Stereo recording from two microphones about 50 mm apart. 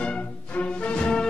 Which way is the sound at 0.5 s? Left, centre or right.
Left.